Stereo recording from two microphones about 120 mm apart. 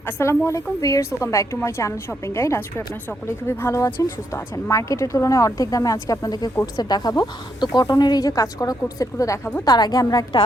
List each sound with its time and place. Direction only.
0.0 s a woman's voice: 25° left (ahead or behind)
9.6 s a woman's voice: 35° left (ahead or behind)